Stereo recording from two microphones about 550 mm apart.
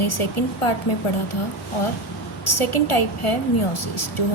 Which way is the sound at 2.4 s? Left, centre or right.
Left.